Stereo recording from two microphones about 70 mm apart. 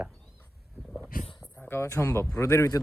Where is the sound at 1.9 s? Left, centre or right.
Left.